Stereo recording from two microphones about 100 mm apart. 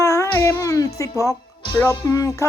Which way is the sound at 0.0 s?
30° left (ahead or behind).